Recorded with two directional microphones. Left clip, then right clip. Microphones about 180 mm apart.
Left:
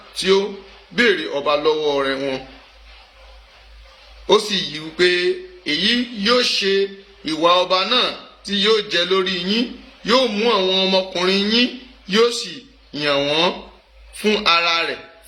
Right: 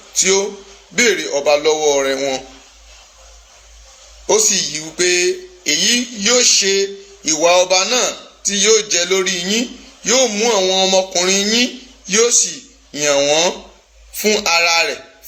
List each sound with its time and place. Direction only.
0.1 s a man's voice: 15° left (ahead or behind)
4.3 s a man's voice: 15° left (ahead or behind)